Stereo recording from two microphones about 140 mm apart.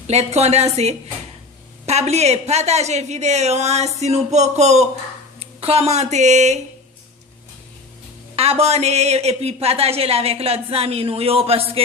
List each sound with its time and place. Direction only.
0.0 s speech: 50° right (ahead or behind)
8.4 s speech: 45° right (ahead or behind)